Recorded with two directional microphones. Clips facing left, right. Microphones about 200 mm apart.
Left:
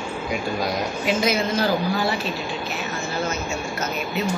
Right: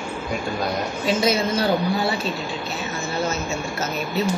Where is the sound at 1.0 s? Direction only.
30° right (ahead or behind).